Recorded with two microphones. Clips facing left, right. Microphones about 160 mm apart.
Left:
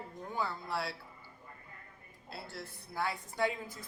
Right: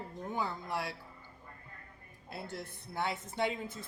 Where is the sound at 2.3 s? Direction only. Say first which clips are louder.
Right 3 dB; 20° right (ahead or behind).